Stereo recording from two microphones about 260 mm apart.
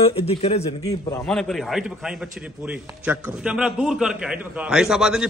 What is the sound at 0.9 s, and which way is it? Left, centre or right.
A man's voice, centre.